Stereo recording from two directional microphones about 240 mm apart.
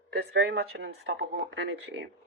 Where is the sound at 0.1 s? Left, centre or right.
Right.